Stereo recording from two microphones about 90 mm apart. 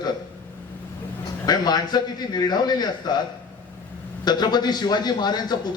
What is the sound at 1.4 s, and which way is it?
A man's voice, 50° left (ahead or behind).